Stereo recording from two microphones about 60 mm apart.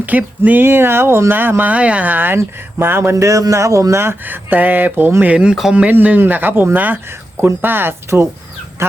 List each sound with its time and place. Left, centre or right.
0.0 s speech: right
0.6 s speech: right
1.7 s speech: right
3.2 s speech: right
4.0 s speech: right
5.2 s a man's voice: right